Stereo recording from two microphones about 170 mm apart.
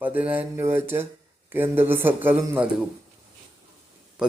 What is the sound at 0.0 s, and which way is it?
Speech, 10° right (ahead or behind).